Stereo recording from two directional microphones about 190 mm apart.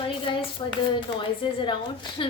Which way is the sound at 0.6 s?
20° left (ahead or behind).